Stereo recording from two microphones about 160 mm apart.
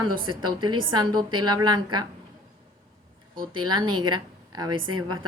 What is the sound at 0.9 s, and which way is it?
A woman's voice, 25° right (ahead or behind).